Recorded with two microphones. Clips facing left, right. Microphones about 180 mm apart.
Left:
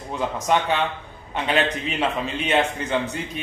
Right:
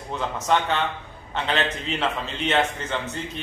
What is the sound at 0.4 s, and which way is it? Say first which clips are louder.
A man's voice: left 1 dB; 15° left (ahead or behind).